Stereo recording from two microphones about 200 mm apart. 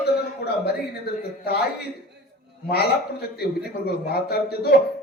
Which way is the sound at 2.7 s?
50° left (ahead or behind).